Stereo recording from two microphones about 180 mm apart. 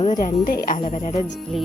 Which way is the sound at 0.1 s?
45° left (ahead or behind).